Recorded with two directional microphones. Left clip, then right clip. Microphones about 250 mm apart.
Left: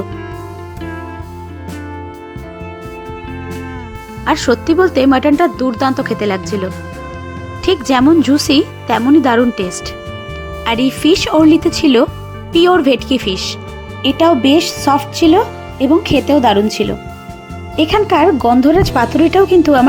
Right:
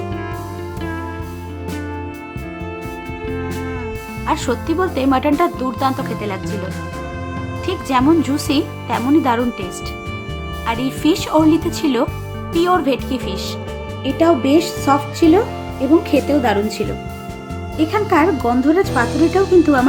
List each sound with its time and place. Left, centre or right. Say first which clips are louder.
4.3 s speech: left 7 dB; left
7.6 s speech: left 5 dB; left
10.7 s speech: left 6 dB; left